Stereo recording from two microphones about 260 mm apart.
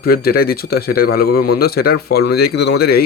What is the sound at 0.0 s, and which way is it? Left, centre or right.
Speech, left.